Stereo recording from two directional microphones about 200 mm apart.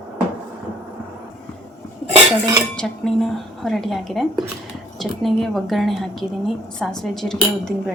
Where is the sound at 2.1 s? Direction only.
20° right (ahead or behind).